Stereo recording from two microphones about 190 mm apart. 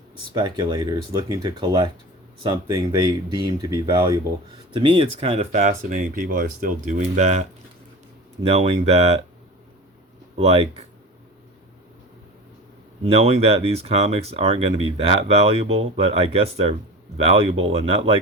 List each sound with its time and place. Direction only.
0.3 s speech: 25° right (ahead or behind)
8.4 s speech: 30° right (ahead or behind)
10.3 s speech: 30° right (ahead or behind)
13.0 s speech: 30° right (ahead or behind)